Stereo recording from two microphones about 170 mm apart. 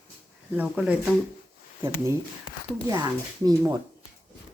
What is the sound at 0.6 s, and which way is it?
Speech, 5° right (ahead or behind).